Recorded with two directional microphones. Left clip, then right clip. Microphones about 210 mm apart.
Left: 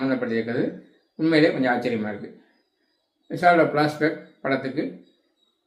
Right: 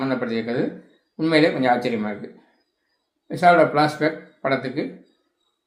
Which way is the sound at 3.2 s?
20° right (ahead or behind).